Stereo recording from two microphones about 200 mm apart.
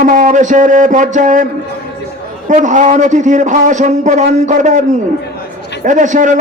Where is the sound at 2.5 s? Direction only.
35° right (ahead or behind).